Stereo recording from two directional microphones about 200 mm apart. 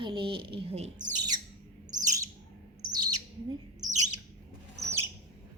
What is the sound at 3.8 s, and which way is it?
Bird, 35° right (ahead or behind).